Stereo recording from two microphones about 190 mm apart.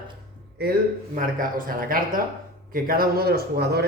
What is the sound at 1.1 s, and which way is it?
Speech, 45° right (ahead or behind).